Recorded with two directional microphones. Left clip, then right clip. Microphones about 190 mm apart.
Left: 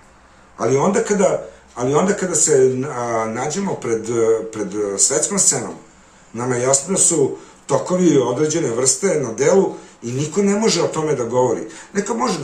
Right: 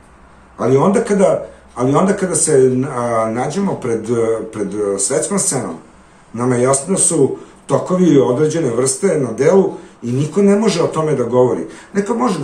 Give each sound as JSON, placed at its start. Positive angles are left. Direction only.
{"t": 0.6, "sound": "speech", "side_deg": 5}